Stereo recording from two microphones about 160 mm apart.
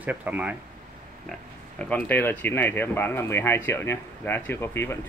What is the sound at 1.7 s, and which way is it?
Speech, 10° left (ahead or behind).